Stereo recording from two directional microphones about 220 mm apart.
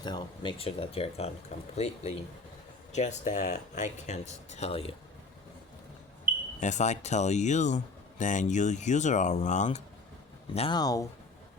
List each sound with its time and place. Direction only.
0.0 s speech: 20° left (ahead or behind)
6.6 s speech: 35° left (ahead or behind); by 11.0 s 15° left (ahead or behind)